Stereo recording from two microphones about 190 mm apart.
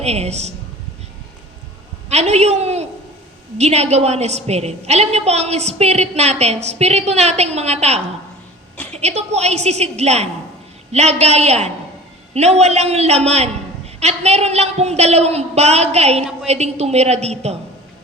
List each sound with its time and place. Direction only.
0.0 s a woman's voice: 35° right (ahead or behind)
2.0 s a woman's voice: 35° right (ahead or behind)